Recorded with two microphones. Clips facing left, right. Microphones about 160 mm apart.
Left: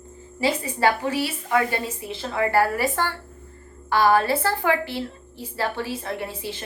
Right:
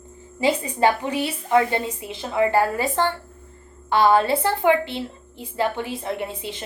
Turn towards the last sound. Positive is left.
turn(degrees=-20)  # may be behind; listen again after turning